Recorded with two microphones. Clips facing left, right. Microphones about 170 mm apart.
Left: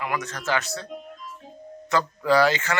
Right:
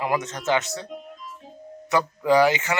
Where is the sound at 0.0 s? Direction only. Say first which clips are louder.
Right 4 dB; 25° right (ahead or behind).